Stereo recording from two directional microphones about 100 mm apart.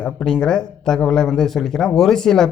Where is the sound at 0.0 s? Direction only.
5° left (ahead or behind).